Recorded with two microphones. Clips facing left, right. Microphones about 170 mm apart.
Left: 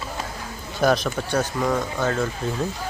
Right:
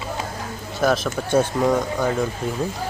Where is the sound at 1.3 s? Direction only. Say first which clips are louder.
Right 5 dB; 20° right (ahead or behind).